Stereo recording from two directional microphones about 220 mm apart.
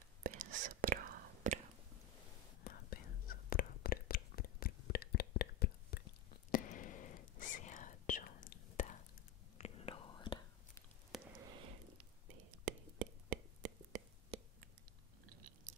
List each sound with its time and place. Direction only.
0.2 s whispering: 40° right (ahead or behind)
2.6 s whispering: 45° left (ahead or behind); by 10.8 s 20° left (ahead or behind)
11.1 s a sound: centre (ahead or behind)
12.6 s whispering: 35° right (ahead or behind)